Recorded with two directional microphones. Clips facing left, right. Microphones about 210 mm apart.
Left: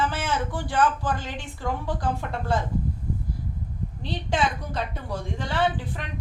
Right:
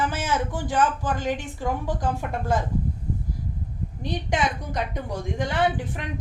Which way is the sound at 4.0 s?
15° right (ahead or behind).